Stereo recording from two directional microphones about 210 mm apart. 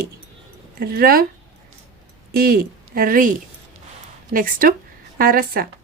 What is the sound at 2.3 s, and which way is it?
Speech, 45° right (ahead or behind).